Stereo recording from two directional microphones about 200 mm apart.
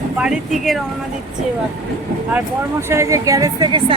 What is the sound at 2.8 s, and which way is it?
A woman's voice, 15° right (ahead or behind).